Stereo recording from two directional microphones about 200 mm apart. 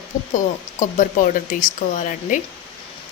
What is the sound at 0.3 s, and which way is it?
Speech, 40° left (ahead or behind).